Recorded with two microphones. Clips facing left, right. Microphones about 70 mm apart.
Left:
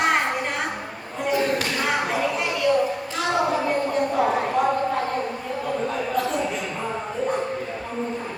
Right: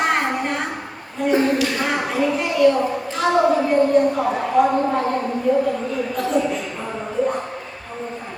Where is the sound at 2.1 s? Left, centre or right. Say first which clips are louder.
Right 4 dB; centre.